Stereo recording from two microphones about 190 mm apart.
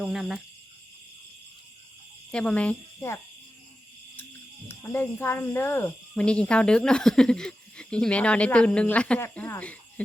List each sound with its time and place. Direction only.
0.0 s speech: centre (ahead or behind)
2.3 s speech: 5° left (ahead or behind)
4.8 s speech: 10° left (ahead or behind)